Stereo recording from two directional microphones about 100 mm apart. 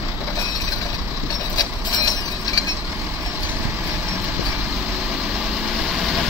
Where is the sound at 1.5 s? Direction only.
45° left (ahead or behind).